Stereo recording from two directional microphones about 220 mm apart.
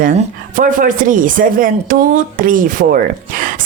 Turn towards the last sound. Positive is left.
turn(degrees=-40)  # may be behind; listen again after turning